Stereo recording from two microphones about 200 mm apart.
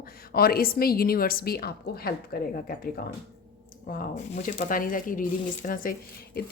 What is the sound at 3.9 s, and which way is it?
A woman's voice, 45° left (ahead or behind).